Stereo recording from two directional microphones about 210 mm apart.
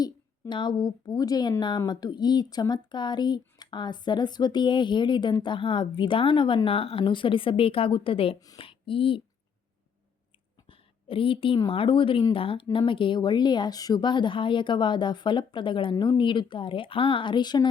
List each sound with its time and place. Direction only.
0.0 s a woman's voice: 20° left (ahead or behind)
10.7 s a woman's voice: 25° left (ahead or behind)